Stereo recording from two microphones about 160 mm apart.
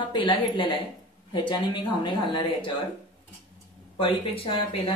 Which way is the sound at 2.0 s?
30° left (ahead or behind).